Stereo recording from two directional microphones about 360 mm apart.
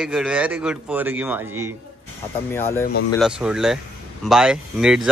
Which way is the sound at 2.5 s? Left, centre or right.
Centre.